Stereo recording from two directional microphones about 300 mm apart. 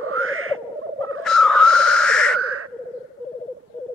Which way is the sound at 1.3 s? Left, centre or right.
Centre.